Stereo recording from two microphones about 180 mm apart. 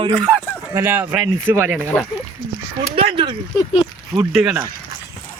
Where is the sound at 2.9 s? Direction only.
30° right (ahead or behind).